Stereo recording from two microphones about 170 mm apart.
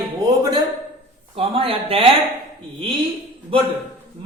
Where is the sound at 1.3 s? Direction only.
35° right (ahead or behind).